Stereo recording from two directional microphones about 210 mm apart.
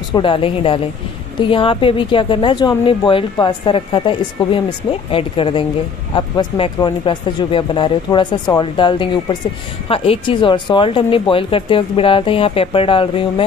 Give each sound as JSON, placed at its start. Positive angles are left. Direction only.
{"t": 0.1, "sound": "a woman's voice", "side_deg": 25}